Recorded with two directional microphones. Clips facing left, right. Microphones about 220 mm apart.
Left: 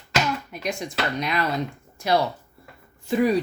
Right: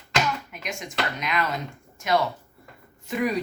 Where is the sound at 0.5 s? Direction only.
35° left (ahead or behind).